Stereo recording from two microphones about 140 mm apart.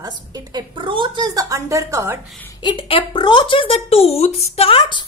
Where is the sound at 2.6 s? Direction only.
35° left (ahead or behind).